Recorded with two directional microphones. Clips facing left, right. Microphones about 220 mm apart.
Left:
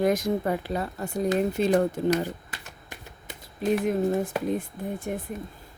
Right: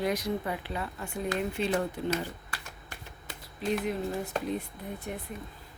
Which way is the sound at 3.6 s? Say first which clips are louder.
Left 7 dB; 50° left (ahead or behind).